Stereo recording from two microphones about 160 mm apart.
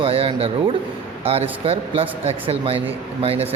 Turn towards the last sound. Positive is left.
turn(degrees=-40)  # may be behind; listen again after turning